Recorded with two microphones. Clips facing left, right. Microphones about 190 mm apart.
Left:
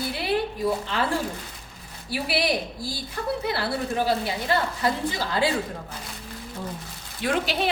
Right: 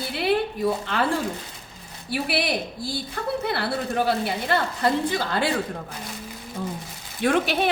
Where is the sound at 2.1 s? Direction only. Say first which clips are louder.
Even; 55° right (ahead or behind).